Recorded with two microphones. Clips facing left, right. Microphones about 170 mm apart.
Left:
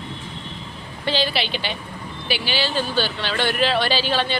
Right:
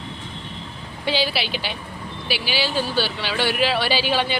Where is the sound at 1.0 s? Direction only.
10° right (ahead or behind).